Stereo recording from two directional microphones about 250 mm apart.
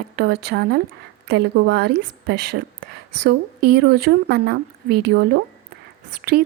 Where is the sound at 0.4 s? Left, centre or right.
Right.